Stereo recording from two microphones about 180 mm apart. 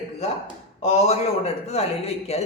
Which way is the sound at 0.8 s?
35° left (ahead or behind).